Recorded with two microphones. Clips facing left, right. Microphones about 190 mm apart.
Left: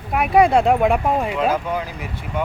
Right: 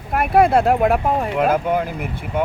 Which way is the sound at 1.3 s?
55° right (ahead or behind).